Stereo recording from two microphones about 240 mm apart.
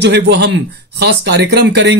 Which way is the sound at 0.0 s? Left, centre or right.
Right.